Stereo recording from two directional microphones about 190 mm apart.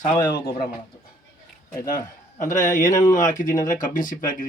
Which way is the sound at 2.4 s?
40° left (ahead or behind).